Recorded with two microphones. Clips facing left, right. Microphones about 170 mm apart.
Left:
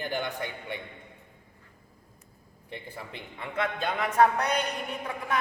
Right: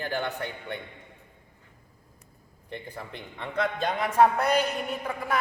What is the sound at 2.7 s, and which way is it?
A man's voice, 5° left (ahead or behind).